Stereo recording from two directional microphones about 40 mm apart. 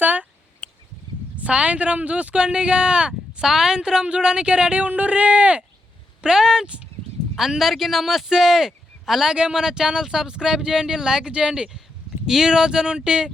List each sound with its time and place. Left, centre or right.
0.0 s a sound: right
1.4 s a woman's voice: right
2.4 s a woman's voice: right
6.2 s a woman's voice: centre